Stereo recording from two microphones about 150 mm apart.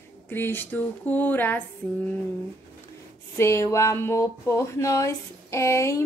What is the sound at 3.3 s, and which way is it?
Speech, 20° left (ahead or behind).